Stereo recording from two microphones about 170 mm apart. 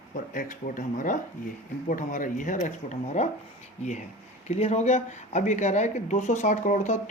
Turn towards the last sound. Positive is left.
turn(degrees=45)  # may be behind; listen again after turning